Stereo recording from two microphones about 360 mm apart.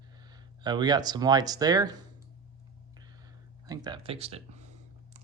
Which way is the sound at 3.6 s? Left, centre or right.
Centre.